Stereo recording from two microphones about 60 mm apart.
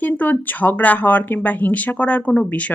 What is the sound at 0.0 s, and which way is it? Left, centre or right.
Speech, left.